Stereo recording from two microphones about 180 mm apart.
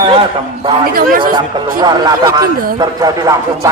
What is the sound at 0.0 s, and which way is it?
Speech, 30° right (ahead or behind).